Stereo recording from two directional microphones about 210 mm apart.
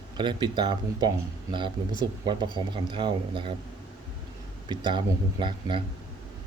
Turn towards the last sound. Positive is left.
turn(degrees=-25)  # may be behind; listen again after turning